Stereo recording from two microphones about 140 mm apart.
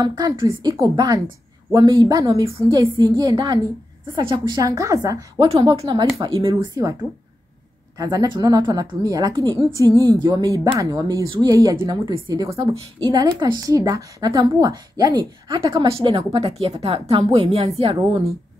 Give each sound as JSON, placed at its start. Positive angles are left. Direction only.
{"t": 0.0, "sound": "a woman's voice", "side_deg": -30}
{"t": 4.6, "sound": "a woman's voice", "side_deg": -25}
{"t": 8.0, "sound": "speech", "side_deg": -30}
{"t": 12.4, "sound": "a woman's voice", "side_deg": -40}
{"t": 13.1, "sound": "a woman's voice", "side_deg": -30}